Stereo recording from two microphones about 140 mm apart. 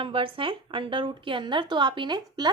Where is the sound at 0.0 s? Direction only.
40° right (ahead or behind).